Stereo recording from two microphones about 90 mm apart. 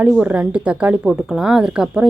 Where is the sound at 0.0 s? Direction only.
15° right (ahead or behind).